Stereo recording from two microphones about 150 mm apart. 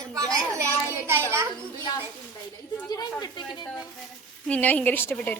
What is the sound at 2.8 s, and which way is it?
Speech, 25° left (ahead or behind).